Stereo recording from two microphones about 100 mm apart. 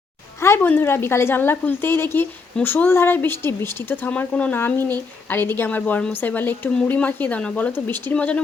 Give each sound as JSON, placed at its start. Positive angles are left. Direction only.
{"t": 0.4, "sound": "speech", "side_deg": 25}